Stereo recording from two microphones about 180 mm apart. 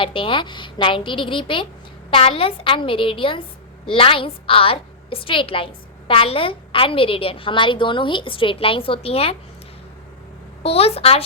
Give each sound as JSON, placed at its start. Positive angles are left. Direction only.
{"t": 0.0, "sound": "a woman's voice", "side_deg": 30}
{"t": 10.6, "sound": "a woman's voice", "side_deg": 35}